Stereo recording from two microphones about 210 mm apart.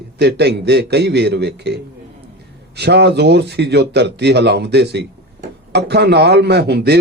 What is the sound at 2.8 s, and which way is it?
A man's voice, 55° right (ahead or behind).